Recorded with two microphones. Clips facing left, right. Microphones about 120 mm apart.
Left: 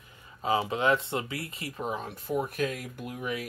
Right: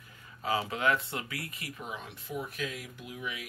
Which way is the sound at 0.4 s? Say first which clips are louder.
Left 4 dB; 20° left (ahead or behind).